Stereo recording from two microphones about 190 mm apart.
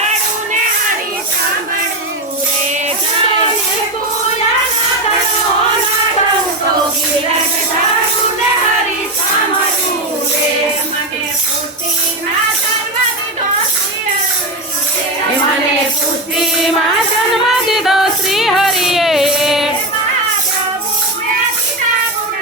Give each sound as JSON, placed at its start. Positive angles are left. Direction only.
{"t": 0.1, "sound": "music", "side_deg": -40}
{"t": 17.7, "sound": "music", "side_deg": 0}